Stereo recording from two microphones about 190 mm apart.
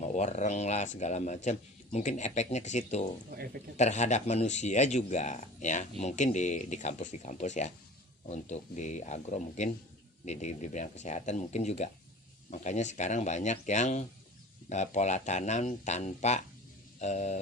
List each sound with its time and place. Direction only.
0.0 s a man's voice: 40° left (ahead or behind)
3.3 s speech: 55° right (ahead or behind)
3.8 s a man's voice: 35° left (ahead or behind)